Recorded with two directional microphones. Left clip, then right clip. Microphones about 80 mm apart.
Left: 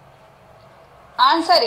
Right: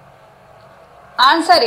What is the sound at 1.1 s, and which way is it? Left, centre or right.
Speech, right.